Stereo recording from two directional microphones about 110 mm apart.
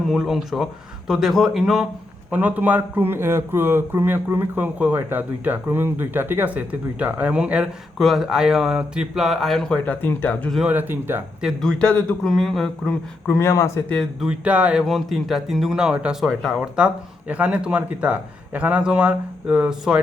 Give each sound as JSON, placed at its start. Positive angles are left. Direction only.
{"t": 0.0, "sound": "speech", "side_deg": 0}
{"t": 2.3, "sound": "speech", "side_deg": -15}
{"t": 7.9, "sound": "speech", "side_deg": 0}
{"t": 10.7, "sound": "speech", "side_deg": -20}
{"t": 11.6, "sound": "a man's voice", "side_deg": 10}
{"t": 13.2, "sound": "speech", "side_deg": 25}
{"t": 13.9, "sound": "speech", "side_deg": 5}
{"t": 14.3, "sound": "speech", "side_deg": -10}
{"t": 16.2, "sound": "speech", "side_deg": 0}
{"t": 16.6, "sound": "speech", "side_deg": -10}